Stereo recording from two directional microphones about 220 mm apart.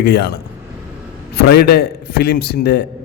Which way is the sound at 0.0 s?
50° left (ahead or behind).